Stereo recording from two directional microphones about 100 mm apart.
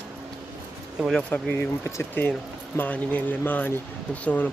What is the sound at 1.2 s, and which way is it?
Speech, 10° left (ahead or behind).